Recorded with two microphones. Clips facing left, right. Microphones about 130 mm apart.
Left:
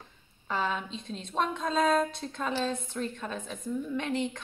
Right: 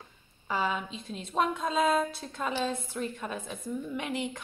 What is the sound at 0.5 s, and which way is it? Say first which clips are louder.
A woman's voice: right 1 dB; 5° right (ahead or behind).